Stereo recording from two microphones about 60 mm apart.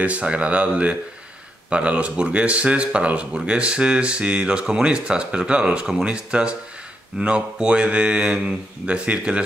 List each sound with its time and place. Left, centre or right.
0.0 s speech: right